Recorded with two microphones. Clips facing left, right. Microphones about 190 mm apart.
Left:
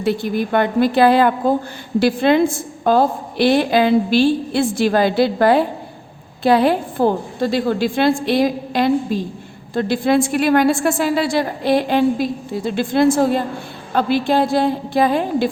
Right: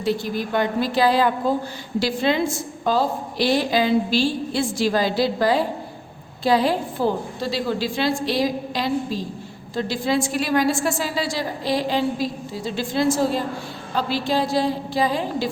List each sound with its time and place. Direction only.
0.0 s a woman's voice: 60° left (ahead or behind)